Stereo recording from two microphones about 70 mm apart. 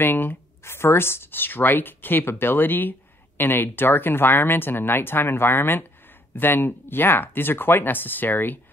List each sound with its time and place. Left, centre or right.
0.0 s speech: left